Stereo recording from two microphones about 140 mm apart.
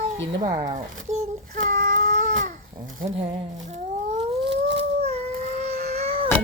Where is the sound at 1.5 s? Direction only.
65° right (ahead or behind).